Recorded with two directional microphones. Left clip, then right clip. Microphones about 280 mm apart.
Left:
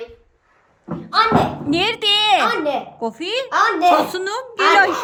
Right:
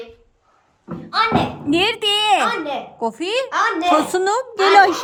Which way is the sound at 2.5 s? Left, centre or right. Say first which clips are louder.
Left 3 dB; left.